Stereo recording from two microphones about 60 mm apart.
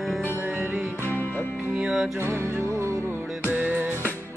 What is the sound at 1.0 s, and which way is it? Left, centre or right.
Music, left.